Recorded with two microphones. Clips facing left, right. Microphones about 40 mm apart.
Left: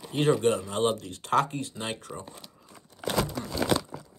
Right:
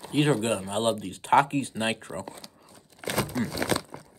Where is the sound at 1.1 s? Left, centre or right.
Right.